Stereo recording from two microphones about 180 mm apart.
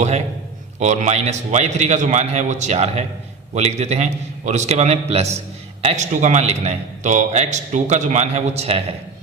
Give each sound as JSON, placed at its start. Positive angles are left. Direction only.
{"t": 0.8, "sound": "a man's voice", "side_deg": -40}